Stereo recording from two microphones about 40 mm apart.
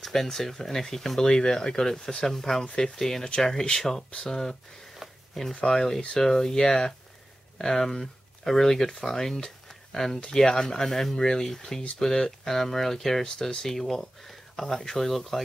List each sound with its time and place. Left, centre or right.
0.0 s speech: centre
4.9 s a sound: centre
5.7 s speech: centre